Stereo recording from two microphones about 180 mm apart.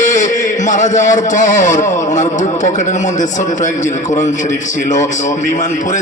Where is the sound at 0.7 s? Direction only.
45° left (ahead or behind).